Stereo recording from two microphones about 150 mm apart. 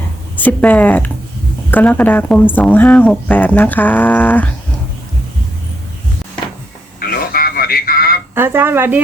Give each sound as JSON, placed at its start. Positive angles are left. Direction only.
{"t": 0.3, "sound": "speech", "side_deg": 10}
{"t": 7.0, "sound": "radio", "side_deg": 85}
{"t": 8.4, "sound": "speech", "side_deg": -15}